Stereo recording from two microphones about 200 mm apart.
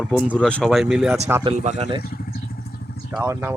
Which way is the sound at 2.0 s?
50° left (ahead or behind).